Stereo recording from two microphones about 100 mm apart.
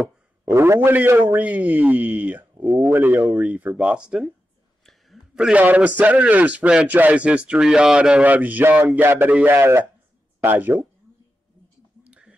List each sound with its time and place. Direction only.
0.5 s a man's voice: 25° right (ahead or behind)
3.3 s a man's voice: 10° right (ahead or behind)
12.1 s whispering: 10° right (ahead or behind)